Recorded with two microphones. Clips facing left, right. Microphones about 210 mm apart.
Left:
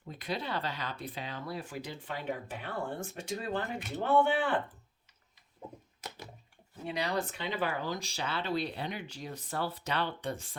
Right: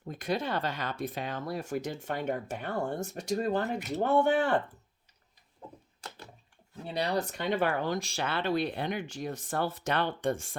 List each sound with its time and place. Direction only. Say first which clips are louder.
0.1 s speech: right 5 dB; 45° right (ahead or behind)
6.8 s speech: right 3 dB; 35° right (ahead or behind)